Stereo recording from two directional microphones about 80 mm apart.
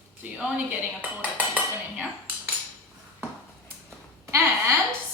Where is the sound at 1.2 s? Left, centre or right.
Centre.